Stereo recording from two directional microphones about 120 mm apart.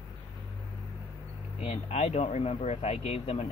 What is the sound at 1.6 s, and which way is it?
Speech, 65° left (ahead or behind).